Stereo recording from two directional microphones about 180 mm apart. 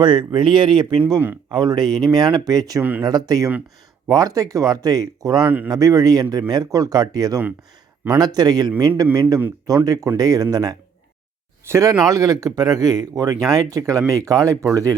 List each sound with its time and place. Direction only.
0.0 s speech: 25° right (ahead or behind)
1.1 s speech: 10° right (ahead or behind)
1.5 s speech: 20° right (ahead or behind)